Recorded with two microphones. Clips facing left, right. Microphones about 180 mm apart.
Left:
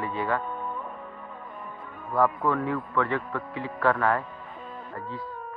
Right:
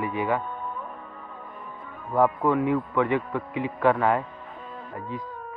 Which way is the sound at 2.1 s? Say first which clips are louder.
Right 3 dB; 20° right (ahead or behind).